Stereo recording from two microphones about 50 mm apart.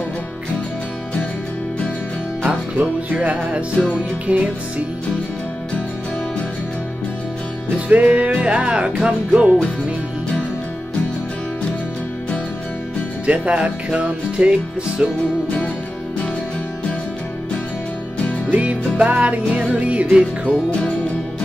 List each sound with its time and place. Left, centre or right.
2.4 s music: right
7.9 s music: right
13.3 s music: right
18.9 s music: right